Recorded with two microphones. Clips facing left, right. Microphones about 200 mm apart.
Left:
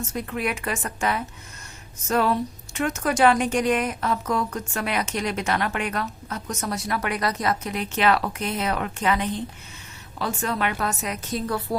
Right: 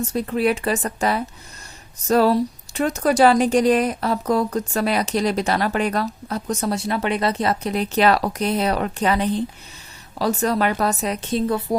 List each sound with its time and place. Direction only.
0.1 s a woman's voice: 30° right (ahead or behind)